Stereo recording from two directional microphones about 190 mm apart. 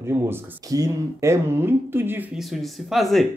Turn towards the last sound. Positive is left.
turn(degrees=0)  # may be behind; listen again after turning